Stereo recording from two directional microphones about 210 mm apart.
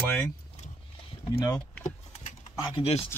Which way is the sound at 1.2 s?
25° left (ahead or behind).